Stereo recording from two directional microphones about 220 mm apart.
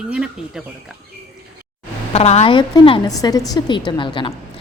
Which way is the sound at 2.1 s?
30° left (ahead or behind).